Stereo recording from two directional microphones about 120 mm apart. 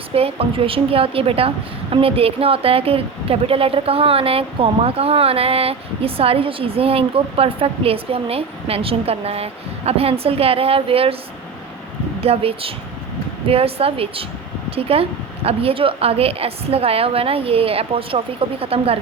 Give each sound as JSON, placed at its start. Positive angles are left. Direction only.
{"t": 0.1, "sound": "a woman's voice", "side_deg": -55}
{"t": 12.2, "sound": "a woman's voice", "side_deg": -55}